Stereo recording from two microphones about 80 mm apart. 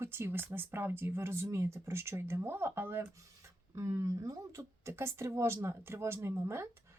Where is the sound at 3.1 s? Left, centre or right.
Right.